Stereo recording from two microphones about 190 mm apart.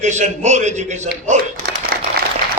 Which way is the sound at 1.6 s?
50° right (ahead or behind).